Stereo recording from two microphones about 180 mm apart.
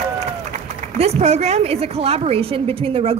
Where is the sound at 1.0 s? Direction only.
35° right (ahead or behind).